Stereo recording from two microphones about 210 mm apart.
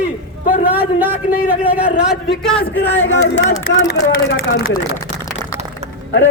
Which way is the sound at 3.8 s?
50° left (ahead or behind).